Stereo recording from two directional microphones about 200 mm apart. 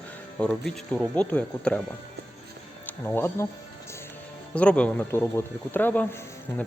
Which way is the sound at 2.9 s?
10° left (ahead or behind).